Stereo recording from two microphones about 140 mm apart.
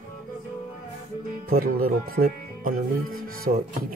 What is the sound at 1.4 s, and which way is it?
Speech, 90° right.